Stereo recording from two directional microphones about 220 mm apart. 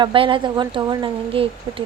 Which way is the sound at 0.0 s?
25° right (ahead or behind).